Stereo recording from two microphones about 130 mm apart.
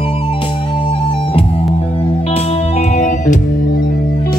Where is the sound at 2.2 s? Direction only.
55° left (ahead or behind); by 3.8 s 80° left.